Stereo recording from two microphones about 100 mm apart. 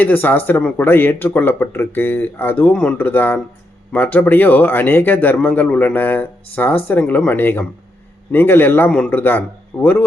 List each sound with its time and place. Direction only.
0.0 s speech: 20° left (ahead or behind)